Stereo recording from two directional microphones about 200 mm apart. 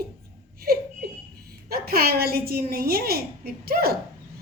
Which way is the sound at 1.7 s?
50° right (ahead or behind).